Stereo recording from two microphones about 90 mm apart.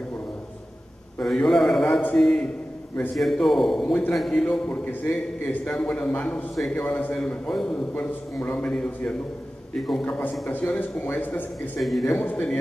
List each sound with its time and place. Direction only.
1.2 s a man's voice: 5° left (ahead or behind)
5.8 s a man's voice: 5° left (ahead or behind)
7.9 s a man's voice: 15° left (ahead or behind)
10.0 s a man's voice: 15° left (ahead or behind)
11.8 s a man's voice: centre (ahead or behind)
12.1 s a man's voice: 20° left (ahead or behind)